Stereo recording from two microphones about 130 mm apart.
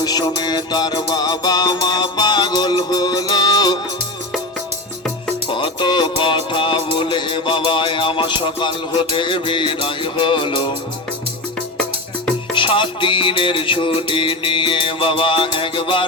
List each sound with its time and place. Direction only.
0.0 s music: 30° left (ahead or behind)
5.5 s music: 40° left (ahead or behind)
12.5 s music: 40° left (ahead or behind)